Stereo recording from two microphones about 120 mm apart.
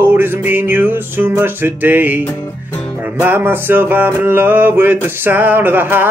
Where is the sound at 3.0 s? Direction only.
15° right (ahead or behind).